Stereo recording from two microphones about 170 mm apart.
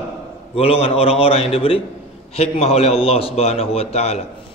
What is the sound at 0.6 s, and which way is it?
A man's voice, 35° left (ahead or behind).